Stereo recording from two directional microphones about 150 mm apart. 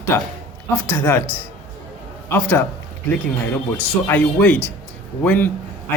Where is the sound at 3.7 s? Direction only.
10° left (ahead or behind).